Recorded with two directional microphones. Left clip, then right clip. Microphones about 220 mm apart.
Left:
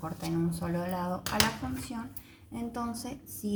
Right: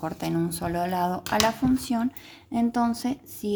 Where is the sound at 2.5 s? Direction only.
45° right (ahead or behind).